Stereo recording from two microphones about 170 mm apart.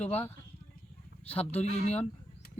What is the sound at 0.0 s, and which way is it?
Speech, 40° left (ahead or behind).